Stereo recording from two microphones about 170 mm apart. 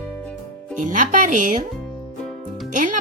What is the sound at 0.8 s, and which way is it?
Speech, 50° right (ahead or behind).